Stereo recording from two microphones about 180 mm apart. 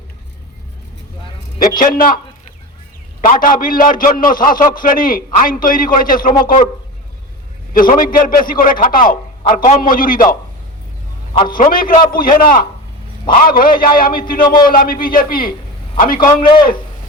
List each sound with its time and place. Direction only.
1.5 s a man's voice: 50° left (ahead or behind)
3.2 s a man's voice: 45° left (ahead or behind)
7.7 s a man's voice: 50° left (ahead or behind)
11.4 s a man's voice: 50° left (ahead or behind)